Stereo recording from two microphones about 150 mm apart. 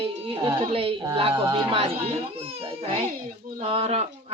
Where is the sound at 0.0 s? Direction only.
40° right (ahead or behind).